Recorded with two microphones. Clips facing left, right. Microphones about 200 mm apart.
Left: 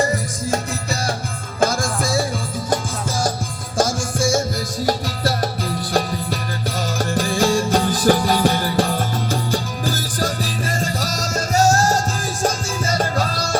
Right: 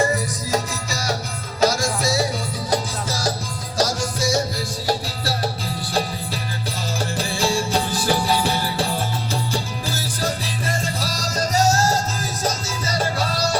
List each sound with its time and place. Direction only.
0.5 s music: 55° left (ahead or behind)